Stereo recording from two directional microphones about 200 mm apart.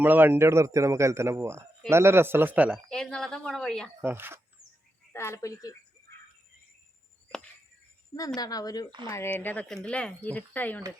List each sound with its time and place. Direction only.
0.0 s a man's voice: 10° right (ahead or behind)
4.0 s a man's voice: 10° right (ahead or behind)
5.1 s speech: 15° left (ahead or behind)
8.4 s speech: 20° left (ahead or behind)